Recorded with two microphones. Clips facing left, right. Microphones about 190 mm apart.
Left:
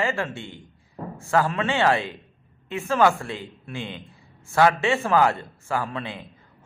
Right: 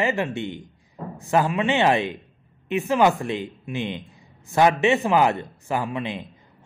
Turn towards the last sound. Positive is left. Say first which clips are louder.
# right 2 dB
turn(degrees=-15)  # may be behind; listen again after turning